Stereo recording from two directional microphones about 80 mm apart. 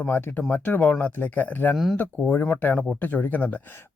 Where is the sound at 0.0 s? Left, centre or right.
Left.